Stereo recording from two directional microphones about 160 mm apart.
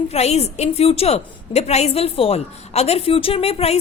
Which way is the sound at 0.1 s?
40° left (ahead or behind).